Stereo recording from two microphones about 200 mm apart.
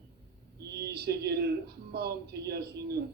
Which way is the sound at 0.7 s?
55° right (ahead or behind).